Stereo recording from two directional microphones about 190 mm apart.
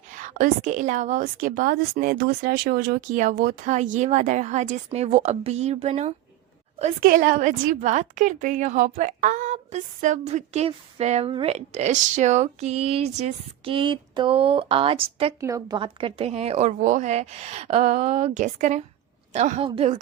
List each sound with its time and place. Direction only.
0.2 s a woman's voice: 40° right (ahead or behind)
7.0 s a woman's voice: 50° right (ahead or behind); by 15.3 s 30° right (ahead or behind)
15.4 s a woman's voice: 15° right (ahead or behind)